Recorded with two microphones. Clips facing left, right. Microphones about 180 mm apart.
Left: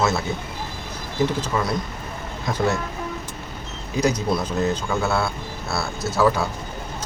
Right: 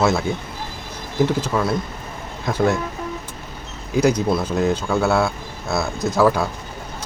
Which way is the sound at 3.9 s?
10° right (ahead or behind).